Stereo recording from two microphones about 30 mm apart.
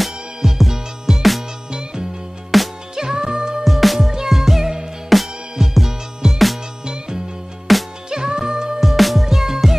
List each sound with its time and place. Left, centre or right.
0.0 s music: centre
1.7 s music: right
2.5 s music: centre
3.0 s music: right
3.6 s music: centre
7.7 s music: centre
8.1 s music: right
8.8 s music: centre